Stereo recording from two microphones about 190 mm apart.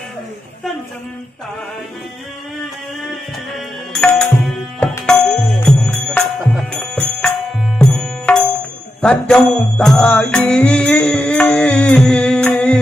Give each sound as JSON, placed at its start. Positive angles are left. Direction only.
{"t": 3.9, "sound": "music", "side_deg": 0}